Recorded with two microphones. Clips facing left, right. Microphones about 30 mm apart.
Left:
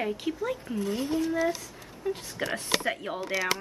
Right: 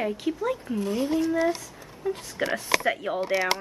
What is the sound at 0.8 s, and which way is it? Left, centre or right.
Speech, right.